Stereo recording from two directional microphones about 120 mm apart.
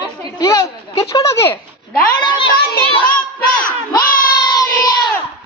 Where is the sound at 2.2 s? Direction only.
40° left (ahead or behind).